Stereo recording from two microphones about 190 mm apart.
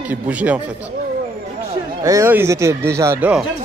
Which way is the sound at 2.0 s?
15° right (ahead or behind).